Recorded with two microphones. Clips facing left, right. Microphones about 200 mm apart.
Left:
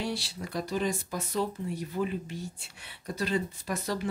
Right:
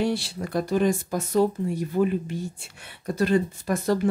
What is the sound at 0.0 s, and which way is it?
Speech, 50° right (ahead or behind).